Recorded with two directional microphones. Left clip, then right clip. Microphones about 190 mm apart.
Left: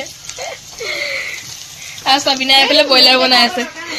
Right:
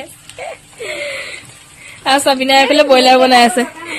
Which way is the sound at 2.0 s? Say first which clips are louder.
Right 1 dB; 65° right (ahead or behind).